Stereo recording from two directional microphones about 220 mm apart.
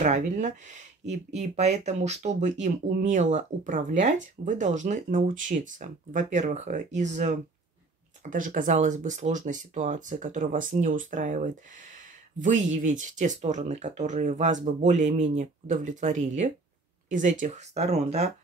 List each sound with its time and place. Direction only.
0.0 s speech: 35° right (ahead or behind)